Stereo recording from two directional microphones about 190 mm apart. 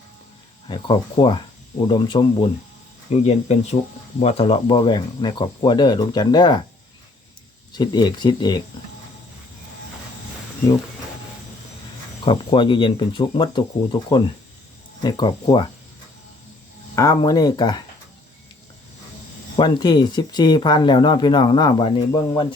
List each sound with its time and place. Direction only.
0.7 s speech: 25° left (ahead or behind)
7.7 s speech: 20° left (ahead or behind)
12.2 s speech: 25° left (ahead or behind)
16.9 s speech: 15° left (ahead or behind)
19.5 s speech: 25° left (ahead or behind)